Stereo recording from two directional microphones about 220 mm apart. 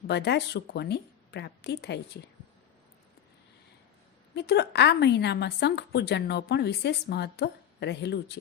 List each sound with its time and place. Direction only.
0.1 s a woman's voice: 50° left (ahead or behind)
4.4 s a woman's voice: 50° left (ahead or behind)